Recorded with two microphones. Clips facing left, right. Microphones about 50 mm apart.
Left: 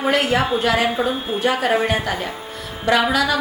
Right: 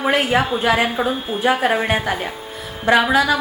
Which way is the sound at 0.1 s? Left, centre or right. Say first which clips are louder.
Even; centre.